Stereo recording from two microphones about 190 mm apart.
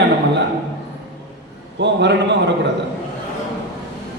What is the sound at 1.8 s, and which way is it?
Speech, 65° right (ahead or behind).